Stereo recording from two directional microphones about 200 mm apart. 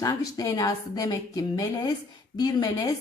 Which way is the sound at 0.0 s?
15° left (ahead or behind).